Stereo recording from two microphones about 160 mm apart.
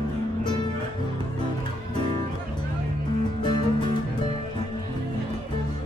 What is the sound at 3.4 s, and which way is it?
Music, 30° left (ahead or behind).